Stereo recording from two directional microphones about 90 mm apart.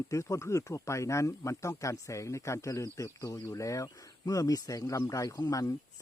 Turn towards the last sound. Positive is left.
turn(degrees=40)  # may be behind; listen again after turning